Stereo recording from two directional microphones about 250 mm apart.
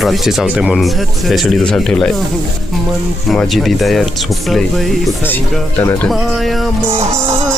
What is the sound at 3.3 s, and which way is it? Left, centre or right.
Speech, centre.